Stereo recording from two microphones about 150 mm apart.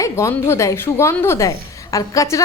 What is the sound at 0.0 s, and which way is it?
A woman's voice, 20° left (ahead or behind).